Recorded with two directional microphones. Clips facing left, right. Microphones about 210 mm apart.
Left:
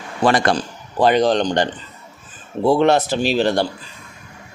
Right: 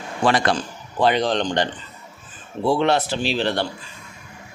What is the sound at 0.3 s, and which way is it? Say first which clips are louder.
Speech: left 3 dB; 45° left (ahead or behind).